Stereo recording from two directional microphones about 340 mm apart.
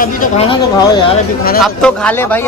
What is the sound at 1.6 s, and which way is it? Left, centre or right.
Speech, centre.